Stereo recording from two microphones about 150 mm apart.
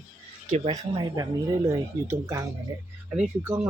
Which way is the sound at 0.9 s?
25° right (ahead or behind).